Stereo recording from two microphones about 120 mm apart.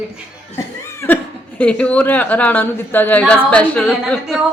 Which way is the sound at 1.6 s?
10° left (ahead or behind).